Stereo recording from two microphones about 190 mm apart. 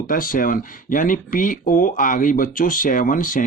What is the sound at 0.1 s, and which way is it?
Speech, 50° left (ahead or behind).